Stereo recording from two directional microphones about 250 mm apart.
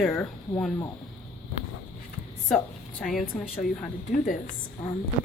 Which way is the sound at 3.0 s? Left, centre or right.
Centre.